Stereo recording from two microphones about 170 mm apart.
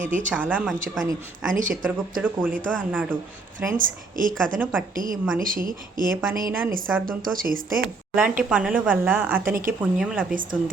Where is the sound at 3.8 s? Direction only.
55° right (ahead or behind).